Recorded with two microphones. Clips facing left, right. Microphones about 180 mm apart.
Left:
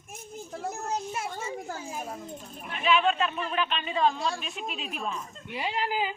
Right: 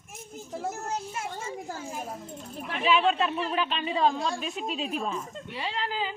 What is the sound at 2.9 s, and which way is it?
Speech, 35° right (ahead or behind).